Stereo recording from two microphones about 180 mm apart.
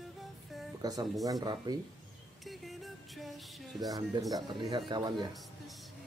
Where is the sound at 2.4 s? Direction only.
Centre (ahead or behind).